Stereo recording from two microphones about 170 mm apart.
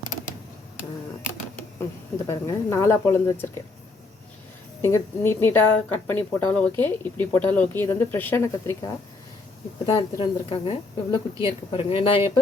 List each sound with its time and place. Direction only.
2.2 s a woman's voice: 15° left (ahead or behind)
4.8 s a woman's voice: 15° left (ahead or behind)
9.8 s a woman's voice: 30° left (ahead or behind)